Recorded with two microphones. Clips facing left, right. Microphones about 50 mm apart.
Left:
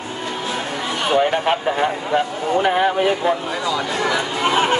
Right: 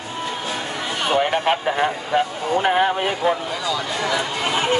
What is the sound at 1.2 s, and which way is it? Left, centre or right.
A man's voice, centre.